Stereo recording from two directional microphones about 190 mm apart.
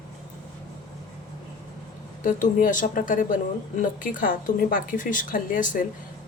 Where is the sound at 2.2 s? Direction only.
45° left (ahead or behind).